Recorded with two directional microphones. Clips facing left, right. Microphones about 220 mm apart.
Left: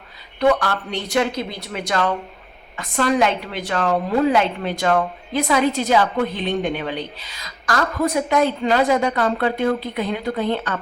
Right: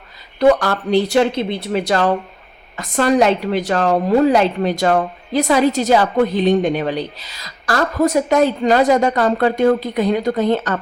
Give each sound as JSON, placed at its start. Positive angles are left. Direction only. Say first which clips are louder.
{"t": 0.3, "sound": "a woman's voice", "louder": "right 4 dB", "side_deg": -40}